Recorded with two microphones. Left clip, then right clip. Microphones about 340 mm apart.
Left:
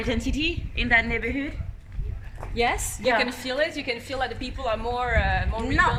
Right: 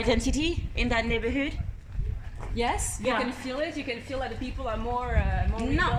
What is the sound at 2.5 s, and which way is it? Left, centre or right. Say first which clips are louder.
A woman's voice: left 4 dB; left.